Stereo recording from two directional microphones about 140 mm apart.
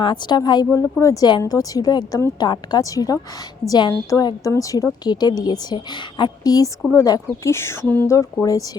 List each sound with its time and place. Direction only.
0.0 s a woman's voice: 35° left (ahead or behind)